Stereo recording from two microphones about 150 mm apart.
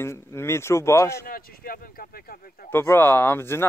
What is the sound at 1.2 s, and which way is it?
Speech, 80° left.